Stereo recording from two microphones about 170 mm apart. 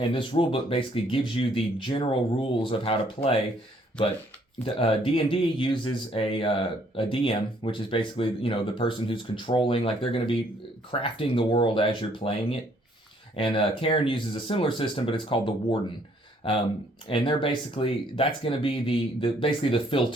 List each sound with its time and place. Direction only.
0.1 s speech: 30° left (ahead or behind)
4.6 s speech: 30° left (ahead or behind)
17.1 s speech: 30° left (ahead or behind)